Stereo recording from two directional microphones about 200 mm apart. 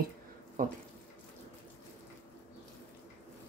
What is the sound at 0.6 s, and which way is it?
Speech, 40° right (ahead or behind).